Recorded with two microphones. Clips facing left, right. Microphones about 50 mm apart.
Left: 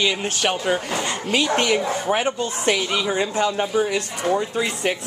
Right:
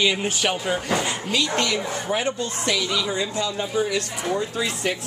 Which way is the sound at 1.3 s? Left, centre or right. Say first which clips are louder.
Left 4 dB; left.